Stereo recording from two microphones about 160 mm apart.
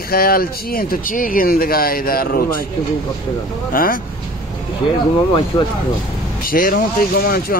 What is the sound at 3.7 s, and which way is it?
Speech, 65° left (ahead or behind).